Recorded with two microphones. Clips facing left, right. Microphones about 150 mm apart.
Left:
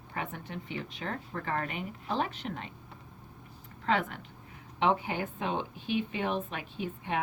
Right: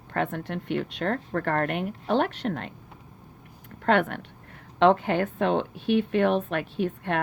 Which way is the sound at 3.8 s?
70° right (ahead or behind).